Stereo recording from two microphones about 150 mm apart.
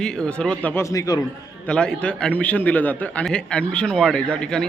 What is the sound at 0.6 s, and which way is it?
Speech, 20° left (ahead or behind).